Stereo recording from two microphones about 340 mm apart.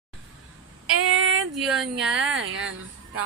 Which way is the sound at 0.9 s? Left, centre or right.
Right.